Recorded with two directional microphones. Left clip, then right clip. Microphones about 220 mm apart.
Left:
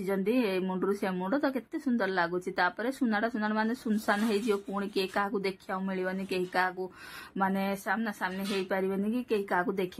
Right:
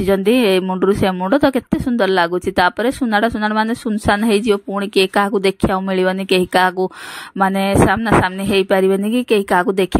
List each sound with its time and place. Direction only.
0.0 s speech: 35° right (ahead or behind)